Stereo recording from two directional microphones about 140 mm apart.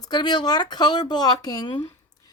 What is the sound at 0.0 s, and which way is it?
Speech, 30° left (ahead or behind).